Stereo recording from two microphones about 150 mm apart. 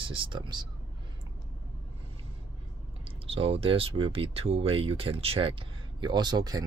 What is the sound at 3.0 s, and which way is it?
Speech, 40° right (ahead or behind).